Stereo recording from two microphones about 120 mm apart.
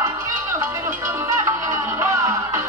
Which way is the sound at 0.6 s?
25° right (ahead or behind).